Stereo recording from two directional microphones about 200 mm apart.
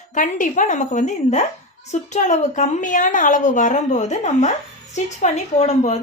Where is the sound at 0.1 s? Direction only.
40° left (ahead or behind).